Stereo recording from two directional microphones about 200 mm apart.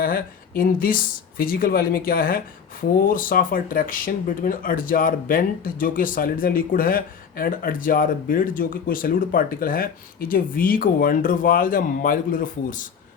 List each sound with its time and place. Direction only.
0.0 s speech: 45° left (ahead or behind)